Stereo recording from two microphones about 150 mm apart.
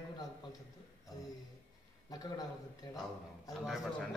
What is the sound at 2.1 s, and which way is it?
Speech, 25° left (ahead or behind).